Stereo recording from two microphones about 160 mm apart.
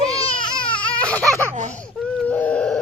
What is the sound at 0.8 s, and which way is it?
Baby cry, 10° left (ahead or behind).